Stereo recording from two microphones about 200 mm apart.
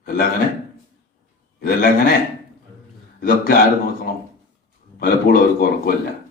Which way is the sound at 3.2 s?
50° left (ahead or behind).